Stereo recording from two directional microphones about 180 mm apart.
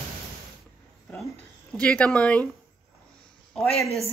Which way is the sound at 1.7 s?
5° left (ahead or behind).